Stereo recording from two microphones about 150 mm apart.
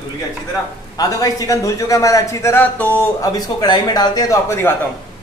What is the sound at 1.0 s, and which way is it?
A man's voice, 25° left (ahead or behind).